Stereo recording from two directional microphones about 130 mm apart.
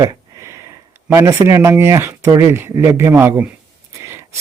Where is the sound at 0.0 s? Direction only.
25° right (ahead or behind).